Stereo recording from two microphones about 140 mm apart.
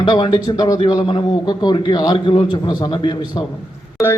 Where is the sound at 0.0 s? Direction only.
35° left (ahead or behind).